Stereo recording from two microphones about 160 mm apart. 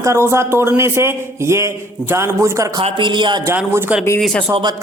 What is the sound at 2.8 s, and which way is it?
Speech, 30° right (ahead or behind).